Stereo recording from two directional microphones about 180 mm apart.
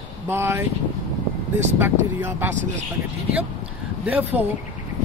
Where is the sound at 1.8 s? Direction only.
10° right (ahead or behind).